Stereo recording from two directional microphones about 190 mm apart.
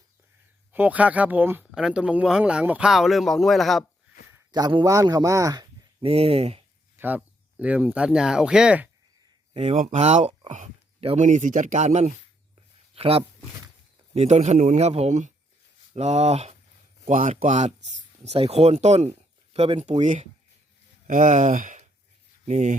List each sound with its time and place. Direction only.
0.7 s speech: 10° right (ahead or behind)
4.5 s speech: 20° right (ahead or behind)
6.9 s speech: 10° right (ahead or behind)
9.6 s speech: 35° right (ahead or behind)